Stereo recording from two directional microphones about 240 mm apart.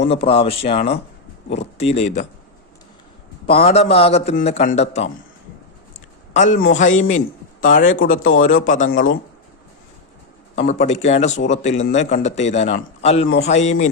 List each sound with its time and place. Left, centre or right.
0.1 s speech: left
3.4 s speech: left
5.9 s a sound: left
6.7 s speech: left
10.7 s speech: left